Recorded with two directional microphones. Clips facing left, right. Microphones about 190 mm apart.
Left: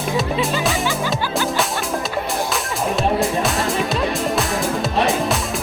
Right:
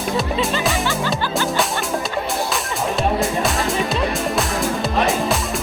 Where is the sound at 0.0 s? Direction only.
Centre (ahead or behind).